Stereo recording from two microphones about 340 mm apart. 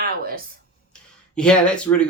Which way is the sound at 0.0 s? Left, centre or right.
Right.